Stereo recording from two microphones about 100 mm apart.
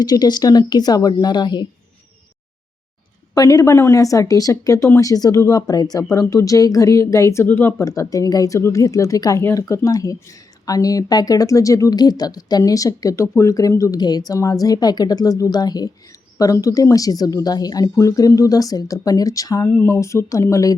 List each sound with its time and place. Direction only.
0.0 s a woman's voice: 45° left (ahead or behind)
3.3 s a woman's voice: 40° left (ahead or behind)
7.4 s speech: 20° left (ahead or behind)
7.9 s a woman's voice: 35° left (ahead or behind)